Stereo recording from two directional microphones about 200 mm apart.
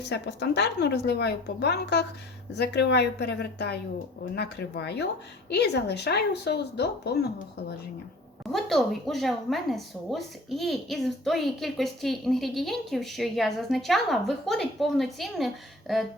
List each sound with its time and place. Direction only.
0.1 s a woman's voice: 60° left (ahead or behind)
8.5 s a woman's voice: centre (ahead or behind)